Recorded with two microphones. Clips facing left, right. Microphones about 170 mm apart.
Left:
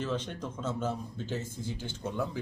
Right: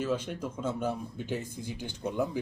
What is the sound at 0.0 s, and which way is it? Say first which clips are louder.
Speech: right 3 dB; 10° right (ahead or behind).